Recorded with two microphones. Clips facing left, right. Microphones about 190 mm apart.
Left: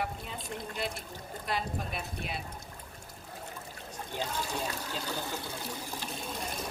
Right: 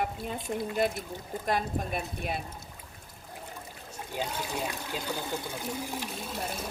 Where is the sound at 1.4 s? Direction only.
45° right (ahead or behind).